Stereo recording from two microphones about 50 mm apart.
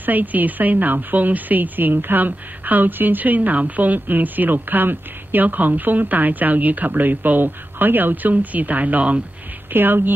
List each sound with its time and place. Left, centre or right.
0.0 s speech: right
9.7 s a woman's voice: right